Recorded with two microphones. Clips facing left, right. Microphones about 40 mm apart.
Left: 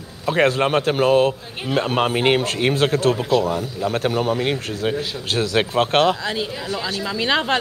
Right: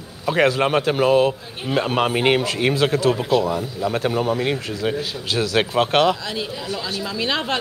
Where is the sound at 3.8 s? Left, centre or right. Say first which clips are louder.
Even; left.